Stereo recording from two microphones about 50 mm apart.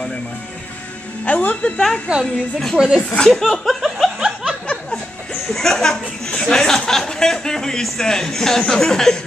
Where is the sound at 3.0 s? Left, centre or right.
Left.